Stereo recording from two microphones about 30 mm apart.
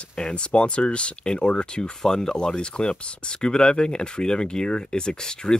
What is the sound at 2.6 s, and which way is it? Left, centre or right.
Speech, left.